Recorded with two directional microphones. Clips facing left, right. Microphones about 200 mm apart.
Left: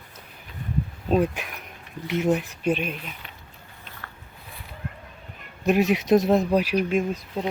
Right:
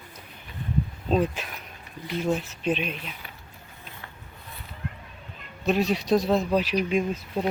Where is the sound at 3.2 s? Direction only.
5° right (ahead or behind).